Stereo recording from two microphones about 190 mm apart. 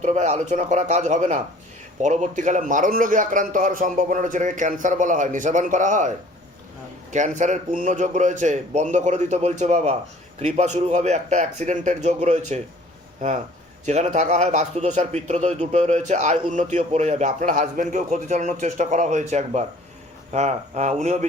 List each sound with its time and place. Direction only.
0.0 s a man's voice: 35° right (ahead or behind)
7.1 s a man's voice: 40° right (ahead or behind)
13.8 s a man's voice: 35° right (ahead or behind)